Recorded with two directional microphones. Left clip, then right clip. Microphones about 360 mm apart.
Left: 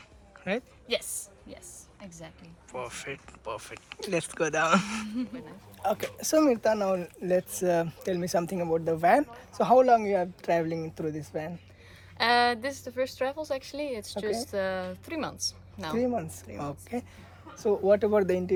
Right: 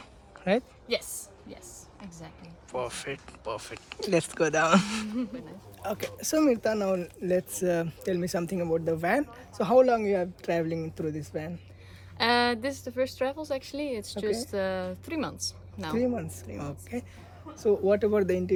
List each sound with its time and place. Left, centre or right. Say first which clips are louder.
0.4 s a woman's voice: right 5 dB; centre